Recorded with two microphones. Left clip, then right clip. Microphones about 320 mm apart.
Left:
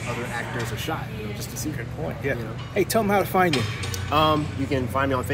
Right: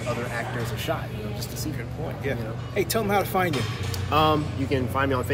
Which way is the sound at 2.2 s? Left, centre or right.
Left.